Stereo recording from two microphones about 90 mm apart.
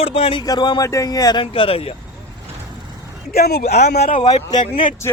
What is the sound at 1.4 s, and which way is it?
Speech, 80° left.